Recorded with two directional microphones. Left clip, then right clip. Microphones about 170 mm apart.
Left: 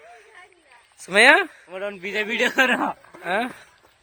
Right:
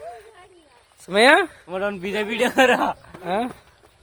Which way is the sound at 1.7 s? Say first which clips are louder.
Right 4 dB; 45° right (ahead or behind).